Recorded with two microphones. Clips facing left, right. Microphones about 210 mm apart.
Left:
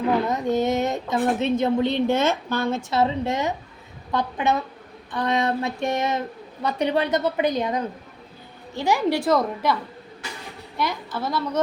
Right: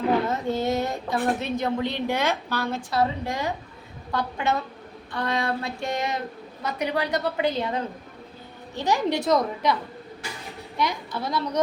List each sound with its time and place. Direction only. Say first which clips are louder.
0.3 s a woman's voice: left 3 dB; 15° left (ahead or behind)
11.1 s a woman's voice: left 2 dB; 5° left (ahead or behind)